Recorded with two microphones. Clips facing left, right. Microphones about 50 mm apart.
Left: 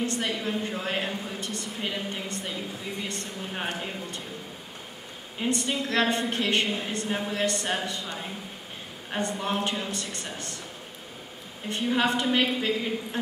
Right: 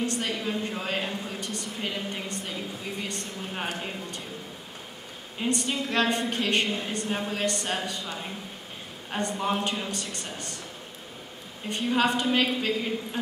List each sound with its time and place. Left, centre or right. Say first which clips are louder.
0.0 s a sound: even; centre
5.4 s a woman's voice: even; centre
11.8 s a woman's voice: even; centre